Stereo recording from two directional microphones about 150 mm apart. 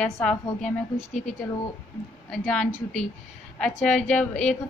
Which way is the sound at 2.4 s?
5° left (ahead or behind).